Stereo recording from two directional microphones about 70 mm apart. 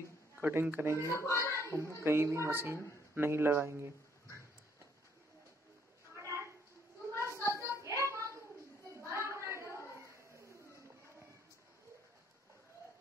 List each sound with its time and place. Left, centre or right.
0.4 s speech: right
1.1 s a child's voice: left
1.7 s a woman's voice: right
6.1 s a sound: right
7.6 s music: right
9.1 s a sound: right